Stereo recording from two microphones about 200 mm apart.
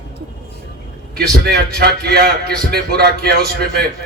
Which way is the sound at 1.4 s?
55° right (ahead or behind).